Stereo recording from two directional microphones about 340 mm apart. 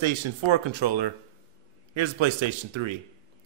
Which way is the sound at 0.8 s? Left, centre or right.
Right.